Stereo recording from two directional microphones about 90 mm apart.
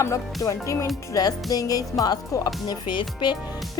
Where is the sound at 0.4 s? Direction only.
35° left (ahead or behind); by 3.3 s 60° left (ahead or behind).